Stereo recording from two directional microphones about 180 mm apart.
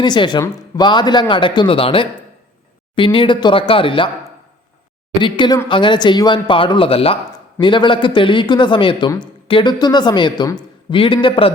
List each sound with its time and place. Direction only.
0.0 s speech: 25° left (ahead or behind)
5.2 s speech: 25° left (ahead or behind)